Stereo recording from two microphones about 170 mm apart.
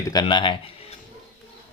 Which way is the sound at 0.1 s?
25° left (ahead or behind).